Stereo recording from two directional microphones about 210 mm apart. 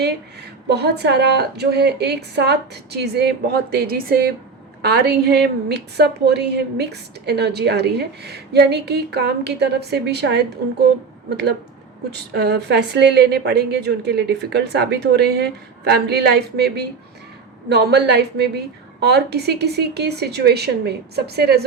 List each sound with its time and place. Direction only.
0.7 s a woman's voice: 50° right (ahead or behind)
12.3 s a woman's voice: 55° right (ahead or behind)